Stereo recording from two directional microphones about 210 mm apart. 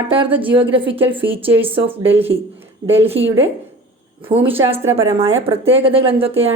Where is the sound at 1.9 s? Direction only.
10° right (ahead or behind).